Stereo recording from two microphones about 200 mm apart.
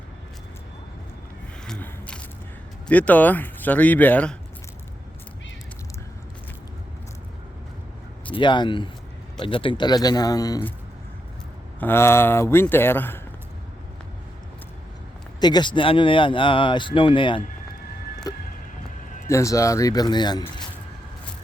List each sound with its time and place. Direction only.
1.6 s single-lens reflex camera: 5° left (ahead or behind)
2.8 s speech: 5° left (ahead or behind)
8.3 s speech: 25° left (ahead or behind)
11.8 s speech: 10° left (ahead or behind)
15.4 s speech: 20° left (ahead or behind)
18.3 s vehicle: 20° left (ahead or behind)
19.3 s speech: 15° left (ahead or behind)